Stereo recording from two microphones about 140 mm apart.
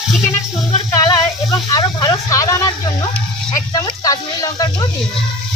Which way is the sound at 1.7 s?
30° left (ahead or behind).